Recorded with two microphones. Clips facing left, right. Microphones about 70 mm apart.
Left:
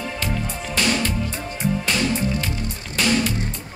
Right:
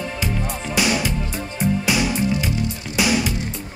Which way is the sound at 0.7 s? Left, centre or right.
Centre.